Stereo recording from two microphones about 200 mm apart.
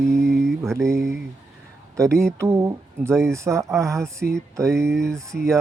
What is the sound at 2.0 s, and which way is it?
Speech, 15° right (ahead or behind).